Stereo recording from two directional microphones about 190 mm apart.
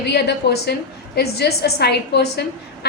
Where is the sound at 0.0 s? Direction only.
60° left (ahead or behind).